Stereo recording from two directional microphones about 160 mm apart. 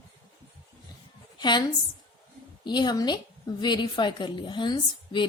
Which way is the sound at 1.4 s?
30° left (ahead or behind).